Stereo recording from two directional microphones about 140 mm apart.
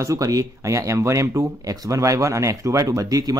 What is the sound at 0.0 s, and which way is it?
Speech, 25° right (ahead or behind).